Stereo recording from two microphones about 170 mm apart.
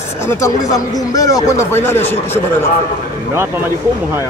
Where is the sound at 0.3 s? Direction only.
20° left (ahead or behind).